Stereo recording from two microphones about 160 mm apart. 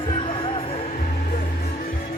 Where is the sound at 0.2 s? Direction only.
35° left (ahead or behind).